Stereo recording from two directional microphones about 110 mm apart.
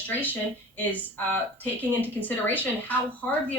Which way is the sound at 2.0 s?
15° left (ahead or behind).